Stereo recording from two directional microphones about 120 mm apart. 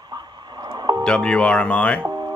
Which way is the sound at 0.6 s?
35° right (ahead or behind).